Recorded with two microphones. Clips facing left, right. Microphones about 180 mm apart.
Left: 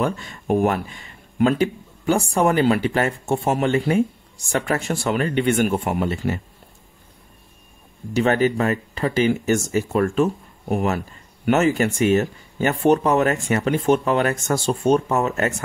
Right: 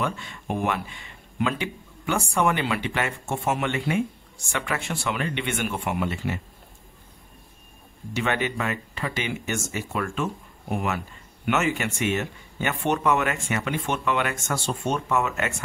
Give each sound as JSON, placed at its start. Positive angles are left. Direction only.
{"t": 0.0, "sound": "speech", "side_deg": 40}
{"t": 8.1, "sound": "speech", "side_deg": 40}